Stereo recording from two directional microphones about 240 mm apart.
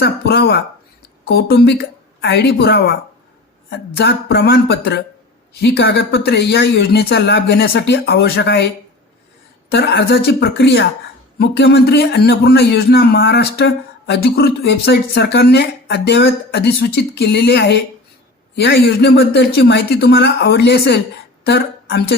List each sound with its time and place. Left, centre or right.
0.0 s a man's voice: left